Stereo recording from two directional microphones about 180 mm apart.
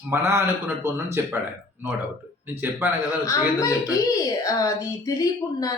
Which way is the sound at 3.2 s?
20° left (ahead or behind).